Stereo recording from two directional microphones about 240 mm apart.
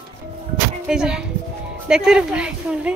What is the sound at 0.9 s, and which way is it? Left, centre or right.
Speech, centre.